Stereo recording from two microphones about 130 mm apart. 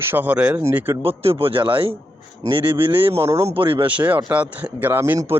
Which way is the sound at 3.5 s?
40° right (ahead or behind).